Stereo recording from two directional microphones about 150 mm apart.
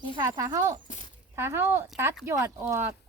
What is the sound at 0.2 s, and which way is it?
Speech, 25° right (ahead or behind).